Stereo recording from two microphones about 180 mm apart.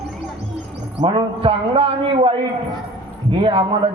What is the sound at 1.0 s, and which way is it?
A man's voice, 30° right (ahead or behind).